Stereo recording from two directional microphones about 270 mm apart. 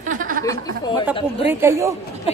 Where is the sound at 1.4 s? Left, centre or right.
Centre.